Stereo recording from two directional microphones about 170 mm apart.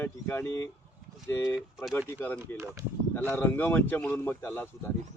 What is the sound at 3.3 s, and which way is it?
Speech, 10° left (ahead or behind).